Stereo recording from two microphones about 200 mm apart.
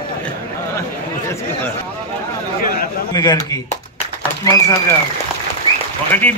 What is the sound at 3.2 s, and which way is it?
Speech, 20° left (ahead or behind).